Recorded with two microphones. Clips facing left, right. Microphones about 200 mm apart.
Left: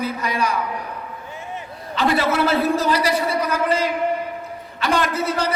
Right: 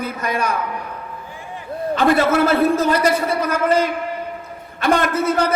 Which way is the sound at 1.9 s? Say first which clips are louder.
Right 4 dB; 50° right (ahead or behind).